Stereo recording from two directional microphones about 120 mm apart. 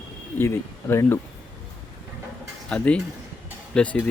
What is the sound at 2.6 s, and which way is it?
Speech, 10° left (ahead or behind).